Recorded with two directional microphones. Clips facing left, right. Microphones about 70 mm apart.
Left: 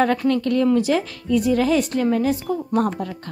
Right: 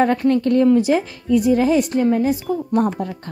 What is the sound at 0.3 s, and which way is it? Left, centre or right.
Speech, right.